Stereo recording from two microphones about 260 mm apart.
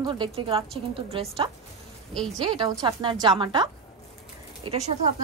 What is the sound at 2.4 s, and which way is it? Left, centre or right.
A woman's voice, centre.